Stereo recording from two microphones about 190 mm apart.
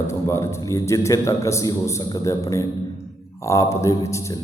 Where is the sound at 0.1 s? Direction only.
15° left (ahead or behind).